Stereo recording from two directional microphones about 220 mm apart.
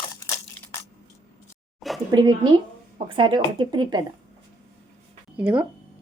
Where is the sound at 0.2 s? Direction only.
15° left (ahead or behind).